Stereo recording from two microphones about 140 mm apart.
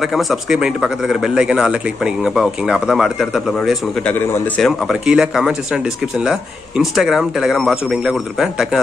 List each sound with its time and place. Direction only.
0.0 s speech: centre (ahead or behind)
4.0 s a man's voice: 10° left (ahead or behind)
4.6 s speech: centre (ahead or behind)